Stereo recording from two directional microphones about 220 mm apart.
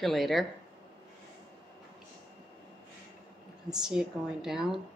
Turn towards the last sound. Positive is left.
turn(degrees=0)  # may be behind; listen again after turning